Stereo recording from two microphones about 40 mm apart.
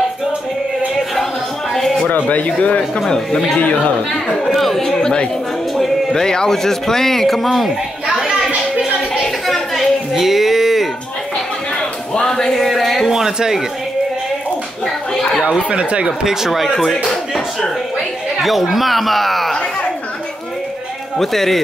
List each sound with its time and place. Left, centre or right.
1.7 s a sound: centre
2.0 s speech: left
4.5 s speech: centre
5.8 s music: centre
6.1 s speech: centre
9.2 s a sound: centre
10.1 s music: centre
12.1 s a sound: centre
12.5 s a sound: centre
13.0 s speech: centre
15.7 s speech: right
16.3 s a man's voice: centre
18.4 s a man's voice: centre
21.2 s speech: centre